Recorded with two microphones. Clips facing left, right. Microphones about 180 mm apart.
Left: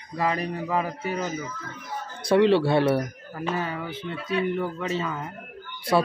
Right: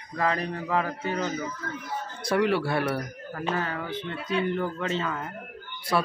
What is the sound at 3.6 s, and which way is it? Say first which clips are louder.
Speech: even; 10° left (ahead or behind).